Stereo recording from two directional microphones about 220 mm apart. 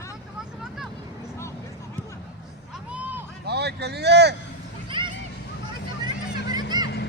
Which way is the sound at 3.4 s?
50° right (ahead or behind).